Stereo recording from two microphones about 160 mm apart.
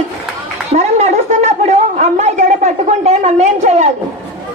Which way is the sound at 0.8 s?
45° right (ahead or behind).